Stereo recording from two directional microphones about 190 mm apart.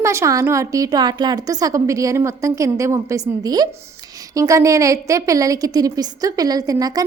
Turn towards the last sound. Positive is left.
turn(degrees=-20)  # may be behind; listen again after turning